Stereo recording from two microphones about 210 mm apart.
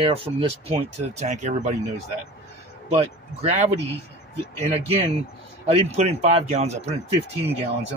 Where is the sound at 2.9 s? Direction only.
30° right (ahead or behind).